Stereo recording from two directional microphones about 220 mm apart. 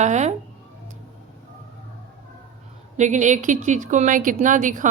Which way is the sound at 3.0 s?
35° right (ahead or behind).